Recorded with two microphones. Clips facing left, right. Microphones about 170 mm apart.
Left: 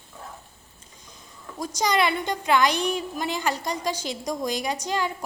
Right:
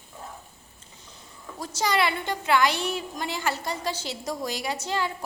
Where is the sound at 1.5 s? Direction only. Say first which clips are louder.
Left 2 dB; 15° left (ahead or behind).